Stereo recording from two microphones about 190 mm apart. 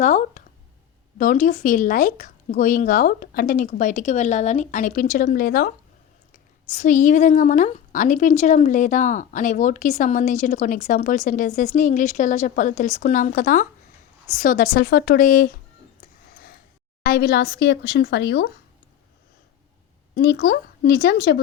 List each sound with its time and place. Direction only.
0.0 s a woman's voice: 40° left (ahead or behind)
6.7 s a woman's voice: 40° left (ahead or behind)
16.3 s a sound: 50° left (ahead or behind)
17.0 s speech: 50° left (ahead or behind)
20.1 s a woman's voice: 55° left (ahead or behind)